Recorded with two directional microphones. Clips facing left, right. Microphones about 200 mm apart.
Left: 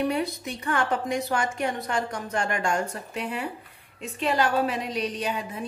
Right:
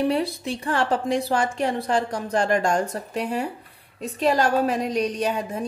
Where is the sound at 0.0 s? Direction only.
30° right (ahead or behind).